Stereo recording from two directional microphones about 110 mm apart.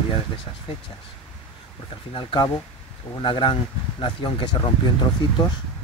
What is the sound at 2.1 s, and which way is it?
Speech, 50° left (ahead or behind).